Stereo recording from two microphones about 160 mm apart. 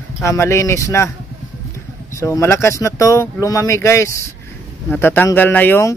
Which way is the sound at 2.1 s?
15° left (ahead or behind).